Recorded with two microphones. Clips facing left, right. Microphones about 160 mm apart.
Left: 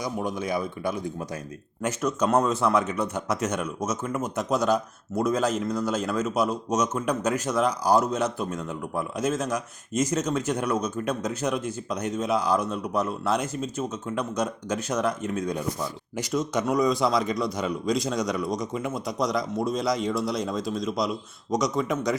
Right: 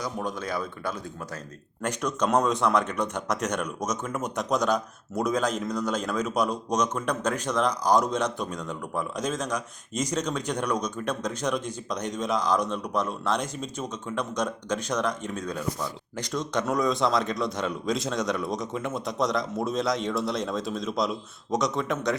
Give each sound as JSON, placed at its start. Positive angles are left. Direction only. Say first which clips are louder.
{"t": 0.0, "sound": "speech", "louder": "left 2 dB", "side_deg": 10}